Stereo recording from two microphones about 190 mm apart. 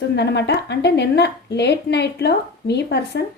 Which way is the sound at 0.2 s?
65° left (ahead or behind).